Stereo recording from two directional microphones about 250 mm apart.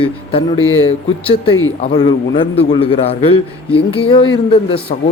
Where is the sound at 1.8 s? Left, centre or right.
Centre.